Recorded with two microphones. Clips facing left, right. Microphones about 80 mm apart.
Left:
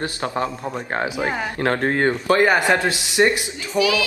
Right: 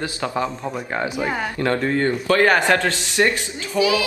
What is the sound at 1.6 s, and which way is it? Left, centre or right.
Speech, left.